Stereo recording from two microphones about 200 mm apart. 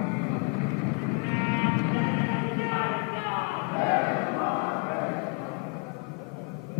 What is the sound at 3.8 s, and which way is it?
Battle cry, 15° left (ahead or behind).